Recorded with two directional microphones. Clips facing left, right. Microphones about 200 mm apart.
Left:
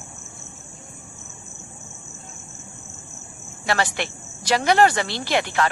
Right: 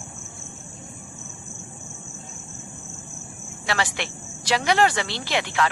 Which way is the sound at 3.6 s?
45° left (ahead or behind).